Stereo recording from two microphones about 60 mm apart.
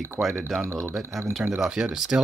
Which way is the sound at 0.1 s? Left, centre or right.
Centre.